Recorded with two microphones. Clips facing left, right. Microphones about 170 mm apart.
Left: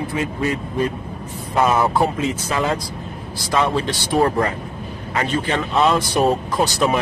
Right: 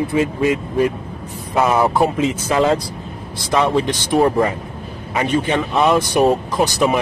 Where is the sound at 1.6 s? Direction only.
15° right (ahead or behind).